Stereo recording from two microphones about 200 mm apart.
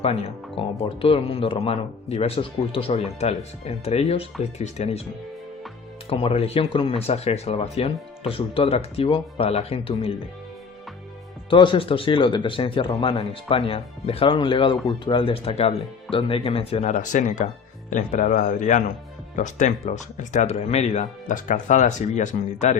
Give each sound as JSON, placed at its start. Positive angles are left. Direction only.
{"t": 0.0, "sound": "speech", "side_deg": 30}
{"t": 6.1, "sound": "speech", "side_deg": 25}
{"t": 11.4, "sound": "speech", "side_deg": 25}